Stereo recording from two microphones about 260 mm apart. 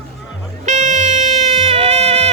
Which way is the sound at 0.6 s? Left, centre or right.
Right.